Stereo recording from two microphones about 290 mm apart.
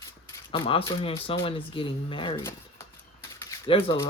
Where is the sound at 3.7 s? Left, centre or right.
Centre.